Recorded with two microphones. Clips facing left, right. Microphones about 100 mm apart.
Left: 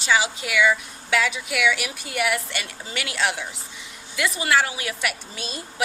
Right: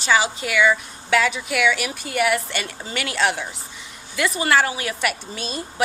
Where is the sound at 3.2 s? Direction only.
45° right (ahead or behind).